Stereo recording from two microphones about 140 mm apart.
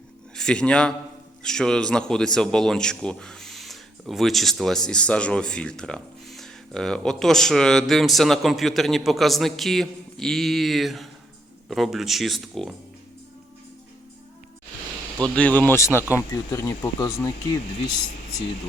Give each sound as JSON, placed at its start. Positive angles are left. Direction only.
{"t": 0.3, "sound": "a man's voice", "side_deg": 5}
{"t": 15.2, "sound": "speech", "side_deg": 10}